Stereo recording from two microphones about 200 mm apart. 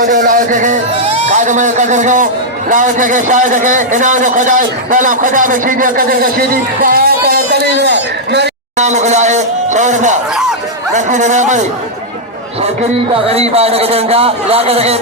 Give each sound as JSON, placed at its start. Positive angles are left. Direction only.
{"t": 0.0, "sound": "a man's voice", "side_deg": -40}
{"t": 8.8, "sound": "a man's voice", "side_deg": -35}
{"t": 13.2, "sound": "a man's voice", "side_deg": -30}